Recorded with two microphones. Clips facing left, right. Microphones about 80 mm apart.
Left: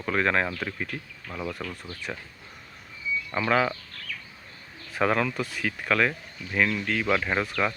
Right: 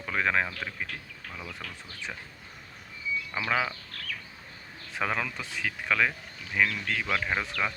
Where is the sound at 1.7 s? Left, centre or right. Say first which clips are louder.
Left 4 dB; centre.